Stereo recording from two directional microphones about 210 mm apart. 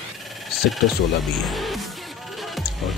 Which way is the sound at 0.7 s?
Centre (ahead or behind).